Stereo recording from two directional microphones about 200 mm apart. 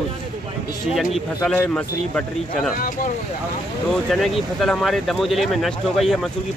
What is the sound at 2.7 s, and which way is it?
Speech, 45° left (ahead or behind).